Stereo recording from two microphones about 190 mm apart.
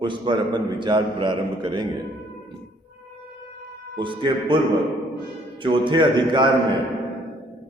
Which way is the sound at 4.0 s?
25° right (ahead or behind).